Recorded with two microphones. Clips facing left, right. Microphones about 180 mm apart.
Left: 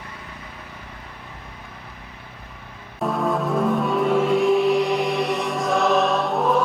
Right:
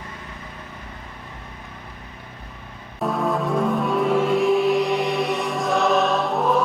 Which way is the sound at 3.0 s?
Centre (ahead or behind).